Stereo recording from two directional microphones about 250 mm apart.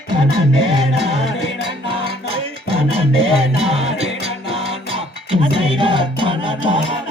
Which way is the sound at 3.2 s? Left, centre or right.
Right.